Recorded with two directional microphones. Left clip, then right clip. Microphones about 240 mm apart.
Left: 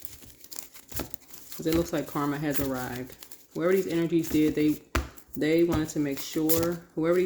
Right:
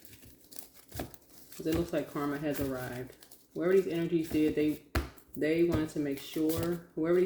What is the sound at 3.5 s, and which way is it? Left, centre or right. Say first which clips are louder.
Speech: left 3 dB; left.